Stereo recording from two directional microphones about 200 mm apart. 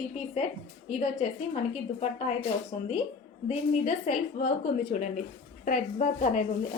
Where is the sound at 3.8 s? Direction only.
40° left (ahead or behind).